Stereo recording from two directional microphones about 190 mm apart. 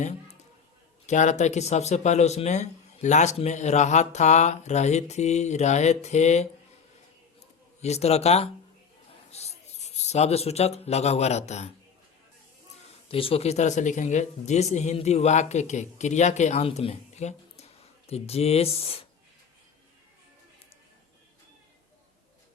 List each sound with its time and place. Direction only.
1.0 s speech: 40° left (ahead or behind)
7.8 s speech: 35° left (ahead or behind)
13.1 s speech: 30° left (ahead or behind)